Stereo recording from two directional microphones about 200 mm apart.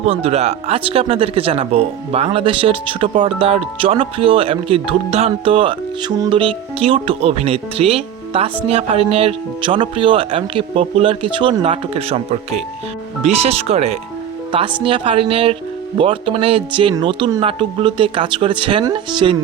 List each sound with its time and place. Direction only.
0.0 s speech: 30° right (ahead or behind)